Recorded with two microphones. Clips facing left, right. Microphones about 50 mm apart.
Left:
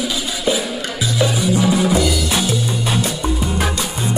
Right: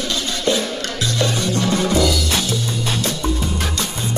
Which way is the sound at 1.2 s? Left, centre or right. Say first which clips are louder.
Left 4 dB; centre.